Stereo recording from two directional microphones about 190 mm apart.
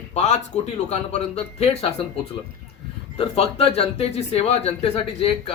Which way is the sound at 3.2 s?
30° left (ahead or behind).